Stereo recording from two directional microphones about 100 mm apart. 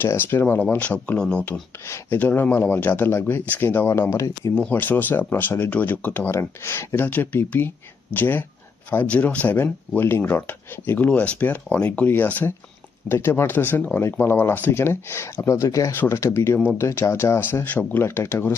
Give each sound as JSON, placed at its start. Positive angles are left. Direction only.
{"t": 0.0, "sound": "speech", "side_deg": 20}
{"t": 4.7, "sound": "speech", "side_deg": 20}